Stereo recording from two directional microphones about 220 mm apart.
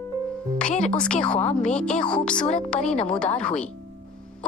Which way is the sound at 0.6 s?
5° left (ahead or behind).